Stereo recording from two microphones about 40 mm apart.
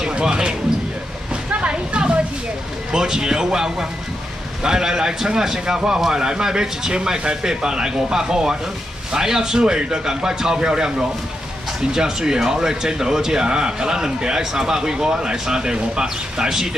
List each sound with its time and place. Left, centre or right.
0.0 s speech: centre
1.5 s a sound: right
2.9 s a man's voice: centre